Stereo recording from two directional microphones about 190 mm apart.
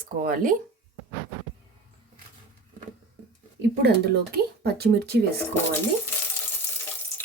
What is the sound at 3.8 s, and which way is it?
Speech, 55° right (ahead or behind).